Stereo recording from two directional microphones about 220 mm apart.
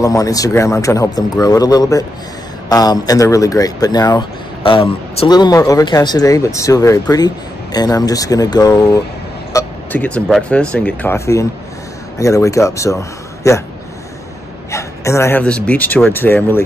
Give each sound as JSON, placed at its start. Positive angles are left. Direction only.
{"t": 0.0, "sound": "speech", "side_deg": 15}
{"t": 14.7, "sound": "speech", "side_deg": 15}